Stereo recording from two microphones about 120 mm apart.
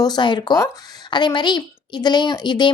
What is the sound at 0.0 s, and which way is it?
Speech, 35° left (ahead or behind).